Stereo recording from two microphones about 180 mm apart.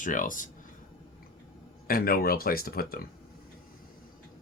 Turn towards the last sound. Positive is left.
turn(degrees=55)  # may be behind; listen again after turning